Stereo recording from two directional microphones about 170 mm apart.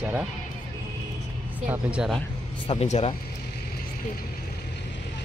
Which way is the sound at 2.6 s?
35° left (ahead or behind).